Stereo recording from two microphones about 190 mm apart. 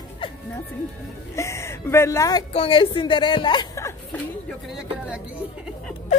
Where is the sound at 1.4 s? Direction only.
15° left (ahead or behind).